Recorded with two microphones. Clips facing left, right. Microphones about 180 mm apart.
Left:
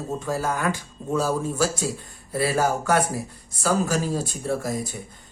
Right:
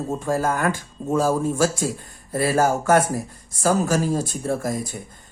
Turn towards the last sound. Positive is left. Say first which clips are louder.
# right 2 dB
turn(degrees=-45)  # may be behind; listen again after turning